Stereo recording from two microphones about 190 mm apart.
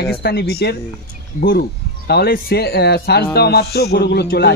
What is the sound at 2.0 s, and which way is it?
Speech, 55° left (ahead or behind).